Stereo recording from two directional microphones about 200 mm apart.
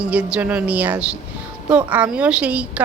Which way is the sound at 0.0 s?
5° right (ahead or behind).